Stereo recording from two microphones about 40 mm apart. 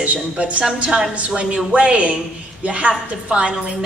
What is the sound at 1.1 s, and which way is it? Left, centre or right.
A woman's voice, right.